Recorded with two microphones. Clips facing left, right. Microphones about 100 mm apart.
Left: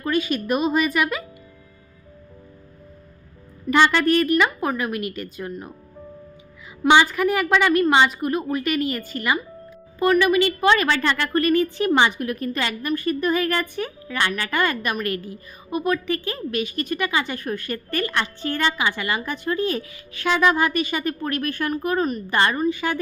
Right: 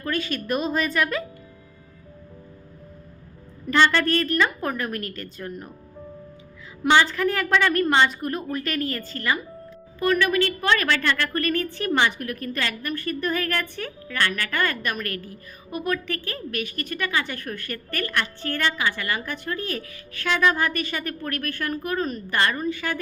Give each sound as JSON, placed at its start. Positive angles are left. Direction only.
{"t": 0.0, "sound": "a woman's voice", "side_deg": 15}
{"t": 3.7, "sound": "a woman's voice", "side_deg": 10}
{"t": 6.8, "sound": "a woman's voice", "side_deg": 15}